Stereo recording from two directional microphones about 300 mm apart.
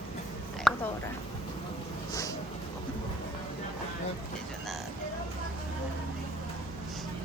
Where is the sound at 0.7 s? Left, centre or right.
Centre.